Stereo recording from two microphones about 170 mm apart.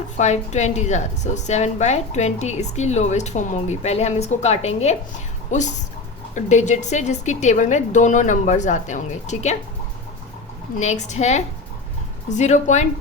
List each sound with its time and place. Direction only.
0.2 s a woman's voice: 45° left (ahead or behind)
10.8 s a woman's voice: 45° left (ahead or behind)